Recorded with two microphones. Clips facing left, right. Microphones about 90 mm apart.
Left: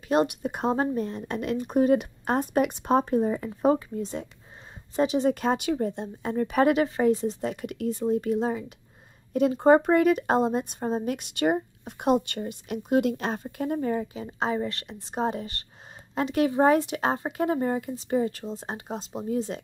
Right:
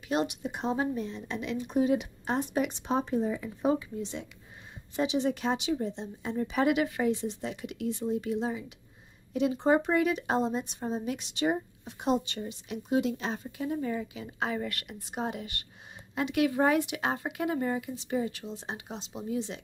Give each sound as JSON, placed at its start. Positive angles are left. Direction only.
{"t": 0.1, "sound": "a woman's voice", "side_deg": 45}